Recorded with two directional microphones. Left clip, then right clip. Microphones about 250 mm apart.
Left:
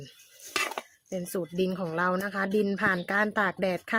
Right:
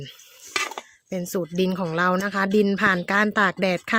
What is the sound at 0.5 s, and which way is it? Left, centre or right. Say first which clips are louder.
Cutlery: right 3 dB; centre.